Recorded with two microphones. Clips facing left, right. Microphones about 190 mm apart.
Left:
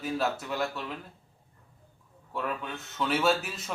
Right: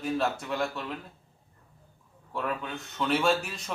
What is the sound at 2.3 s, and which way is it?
A man's voice, centre (ahead or behind).